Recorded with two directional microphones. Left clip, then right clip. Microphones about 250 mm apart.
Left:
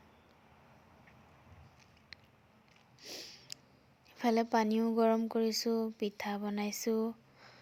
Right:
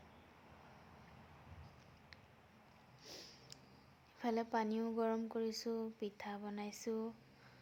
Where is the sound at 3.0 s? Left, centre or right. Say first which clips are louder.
Left 8 dB; left.